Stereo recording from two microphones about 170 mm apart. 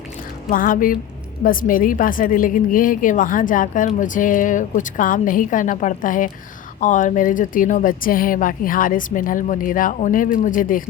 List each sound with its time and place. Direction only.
0.5 s speech: 55° left (ahead or behind)